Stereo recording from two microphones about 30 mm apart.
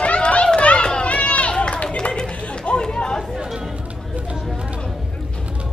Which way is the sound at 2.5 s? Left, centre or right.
Left.